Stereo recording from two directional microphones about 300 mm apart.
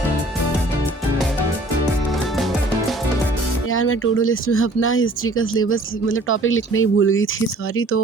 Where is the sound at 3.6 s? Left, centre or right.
Left.